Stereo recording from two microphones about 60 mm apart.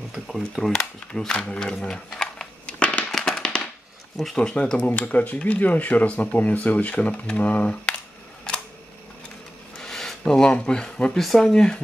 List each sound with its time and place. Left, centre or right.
0.6 s speech: centre
2.0 s a sound: centre
2.6 s crushing: centre
3.1 s firecracker: centre
4.4 s speech: centre
4.7 s speech: left
9.8 s rub: centre
11.1 s speech: centre